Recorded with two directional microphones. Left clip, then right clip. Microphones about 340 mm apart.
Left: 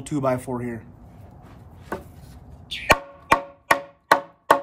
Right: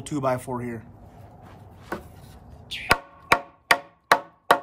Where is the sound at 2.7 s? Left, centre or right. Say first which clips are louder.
Left 2 dB; centre.